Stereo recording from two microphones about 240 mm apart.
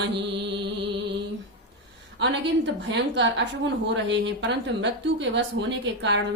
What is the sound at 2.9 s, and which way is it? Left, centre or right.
A woman's voice, right.